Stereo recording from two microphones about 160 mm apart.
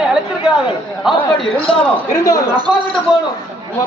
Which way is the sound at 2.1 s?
20° left (ahead or behind).